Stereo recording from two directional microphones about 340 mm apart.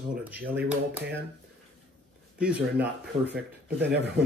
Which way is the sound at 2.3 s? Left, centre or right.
Centre.